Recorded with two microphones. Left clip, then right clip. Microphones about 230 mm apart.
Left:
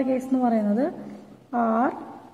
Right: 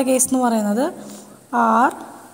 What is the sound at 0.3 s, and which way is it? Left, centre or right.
A woman's voice, right.